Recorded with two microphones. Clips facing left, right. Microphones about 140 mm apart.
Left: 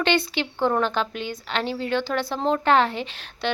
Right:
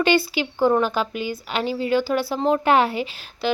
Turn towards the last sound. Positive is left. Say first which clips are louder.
# right 3 dB
turn(degrees=-5)  # may be behind; listen again after turning